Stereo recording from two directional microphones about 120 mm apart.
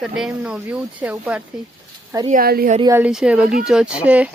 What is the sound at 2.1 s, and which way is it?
Speech, 30° right (ahead or behind).